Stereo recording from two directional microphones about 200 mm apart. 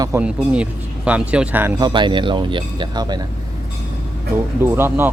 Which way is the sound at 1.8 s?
25° right (ahead or behind).